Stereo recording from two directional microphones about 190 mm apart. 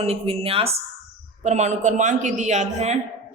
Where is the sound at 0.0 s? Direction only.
30° right (ahead or behind).